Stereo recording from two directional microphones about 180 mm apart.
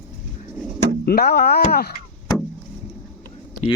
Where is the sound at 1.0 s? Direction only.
60° left (ahead or behind).